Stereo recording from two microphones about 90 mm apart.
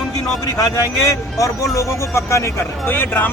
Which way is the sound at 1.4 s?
35° left (ahead or behind).